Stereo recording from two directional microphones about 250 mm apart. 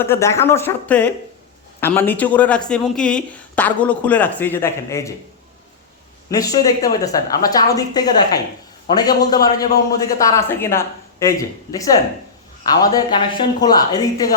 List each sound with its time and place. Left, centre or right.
0.0 s speech: centre
6.3 s speech: centre